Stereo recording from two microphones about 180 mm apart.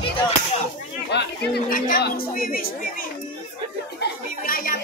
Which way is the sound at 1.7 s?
55° left (ahead or behind).